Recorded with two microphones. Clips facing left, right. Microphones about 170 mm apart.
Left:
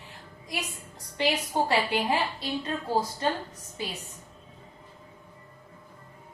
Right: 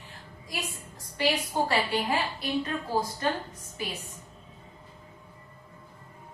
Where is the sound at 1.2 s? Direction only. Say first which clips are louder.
Left 1 dB; 20° left (ahead or behind).